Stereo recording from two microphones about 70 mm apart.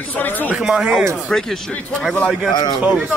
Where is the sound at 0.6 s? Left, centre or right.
Centre.